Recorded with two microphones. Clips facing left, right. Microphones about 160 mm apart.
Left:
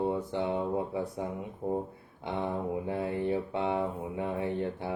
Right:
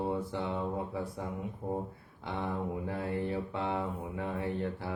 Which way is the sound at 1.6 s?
10° left (ahead or behind).